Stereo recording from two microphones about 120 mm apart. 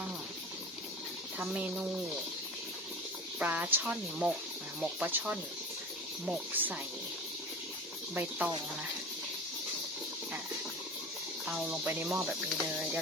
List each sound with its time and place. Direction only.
1.5 s speech: 10° right (ahead or behind)
3.3 s speech: 10° right (ahead or behind)
8.1 s speech: 15° right (ahead or behind)
11.4 s speech: 5° right (ahead or behind)